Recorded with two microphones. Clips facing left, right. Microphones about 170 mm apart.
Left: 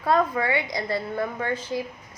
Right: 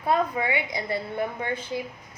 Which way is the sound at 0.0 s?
20° right (ahead or behind).